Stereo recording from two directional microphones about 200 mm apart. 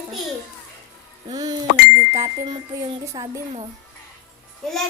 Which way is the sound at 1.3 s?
20° right (ahead or behind).